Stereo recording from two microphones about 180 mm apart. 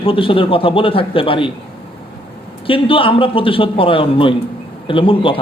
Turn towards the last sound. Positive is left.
turn(degrees=30)  # may be behind; listen again after turning